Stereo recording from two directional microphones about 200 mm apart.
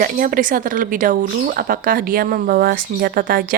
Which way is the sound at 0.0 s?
45° right (ahead or behind).